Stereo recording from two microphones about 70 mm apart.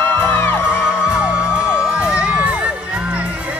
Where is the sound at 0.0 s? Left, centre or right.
Left.